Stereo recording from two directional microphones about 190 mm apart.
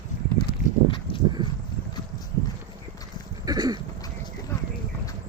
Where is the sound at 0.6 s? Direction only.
40° left (ahead or behind).